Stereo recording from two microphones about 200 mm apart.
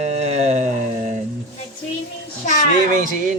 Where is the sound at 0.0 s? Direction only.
35° right (ahead or behind).